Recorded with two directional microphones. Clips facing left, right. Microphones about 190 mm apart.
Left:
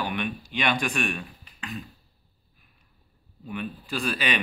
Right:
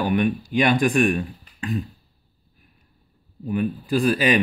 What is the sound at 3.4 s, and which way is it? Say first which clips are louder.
Speech: right 10 dB; 40° right (ahead or behind).